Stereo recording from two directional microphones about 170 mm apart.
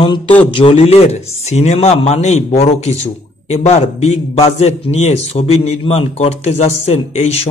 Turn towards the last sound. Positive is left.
turn(degrees=40)  # may be behind; listen again after turning